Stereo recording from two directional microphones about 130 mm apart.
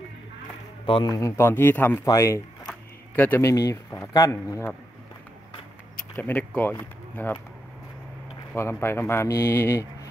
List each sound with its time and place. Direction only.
0.8 s a man's voice: 40° left (ahead or behind)
1.1 s a man's voice: 25° left (ahead or behind)
6.1 s speech: 15° left (ahead or behind)
8.5 s a man's voice: 20° left (ahead or behind)